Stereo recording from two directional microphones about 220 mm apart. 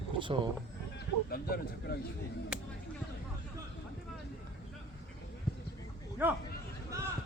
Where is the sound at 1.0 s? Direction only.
45° left (ahead or behind).